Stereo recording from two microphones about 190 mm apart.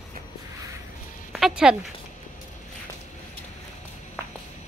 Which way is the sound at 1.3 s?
Centre (ahead or behind).